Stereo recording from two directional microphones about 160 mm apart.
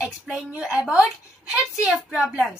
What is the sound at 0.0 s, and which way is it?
A woman's voice, 5° right (ahead or behind).